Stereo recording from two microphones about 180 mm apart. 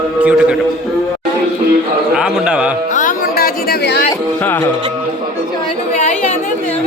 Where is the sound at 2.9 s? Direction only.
50° left (ahead or behind).